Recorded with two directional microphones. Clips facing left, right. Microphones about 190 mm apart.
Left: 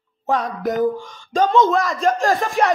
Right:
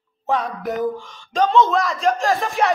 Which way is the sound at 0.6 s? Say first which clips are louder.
Left 4 dB; 40° left (ahead or behind).